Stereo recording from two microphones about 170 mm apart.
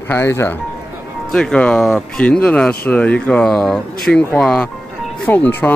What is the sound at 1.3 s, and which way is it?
Speech, 5° left (ahead or behind).